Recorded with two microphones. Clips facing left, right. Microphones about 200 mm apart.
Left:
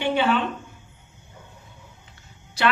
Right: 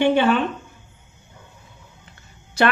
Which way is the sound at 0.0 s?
50° right (ahead or behind).